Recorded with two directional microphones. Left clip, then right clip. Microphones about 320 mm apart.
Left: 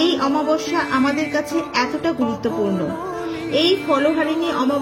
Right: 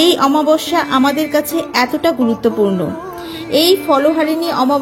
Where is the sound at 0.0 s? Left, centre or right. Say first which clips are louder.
Right 7 dB; right.